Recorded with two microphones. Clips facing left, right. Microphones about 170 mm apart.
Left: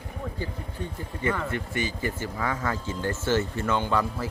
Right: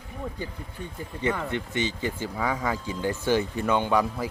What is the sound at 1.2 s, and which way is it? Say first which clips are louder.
Speech: right 1 dB; 20° right (ahead or behind).